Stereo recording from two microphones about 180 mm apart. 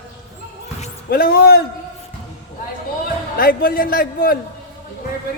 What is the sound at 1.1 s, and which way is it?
Speech, 55° left (ahead or behind).